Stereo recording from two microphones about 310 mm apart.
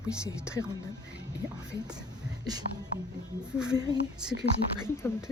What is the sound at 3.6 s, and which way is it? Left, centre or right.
Speech, centre.